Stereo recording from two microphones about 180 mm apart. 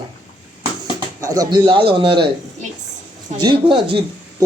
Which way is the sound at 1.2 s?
20° right (ahead or behind).